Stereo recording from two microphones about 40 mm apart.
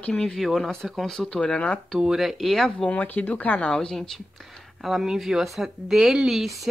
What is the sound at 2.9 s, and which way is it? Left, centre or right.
Speech, left.